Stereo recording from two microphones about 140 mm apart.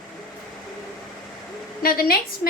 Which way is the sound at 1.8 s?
90° left.